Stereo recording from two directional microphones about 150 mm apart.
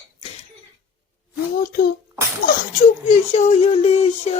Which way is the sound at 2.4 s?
55° left (ahead or behind).